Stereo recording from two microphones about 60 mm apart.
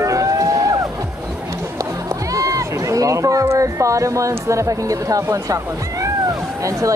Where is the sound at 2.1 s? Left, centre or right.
Right.